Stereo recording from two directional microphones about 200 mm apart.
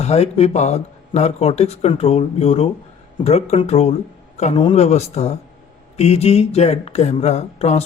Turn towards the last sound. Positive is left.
turn(degrees=30)  # may be behind; listen again after turning